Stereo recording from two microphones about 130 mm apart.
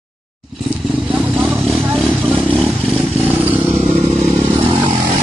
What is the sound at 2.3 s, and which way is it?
Vehicle, 10° left (ahead or behind).